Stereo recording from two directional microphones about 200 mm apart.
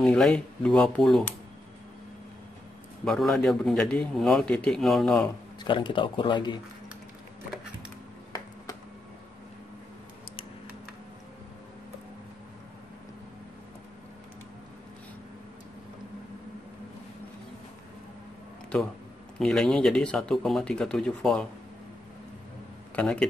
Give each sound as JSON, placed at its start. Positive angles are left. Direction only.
{"t": 0.0, "sound": "a man's voice", "side_deg": 5}
{"t": 3.1, "sound": "a man's voice", "side_deg": 0}
{"t": 5.6, "sound": "speech", "side_deg": 25}
{"t": 19.3, "sound": "a man's voice", "side_deg": 0}
{"t": 22.9, "sound": "speech", "side_deg": 5}